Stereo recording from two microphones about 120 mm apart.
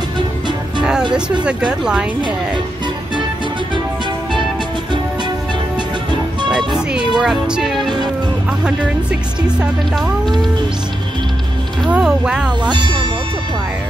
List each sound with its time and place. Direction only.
1.4 s speech: 10° right (ahead or behind)
7.2 s music: 5° right (ahead or behind)
9.6 s speech: 5° right (ahead or behind)
11.9 s speech: 5° right (ahead or behind)
12.6 s speech: 40° right (ahead or behind)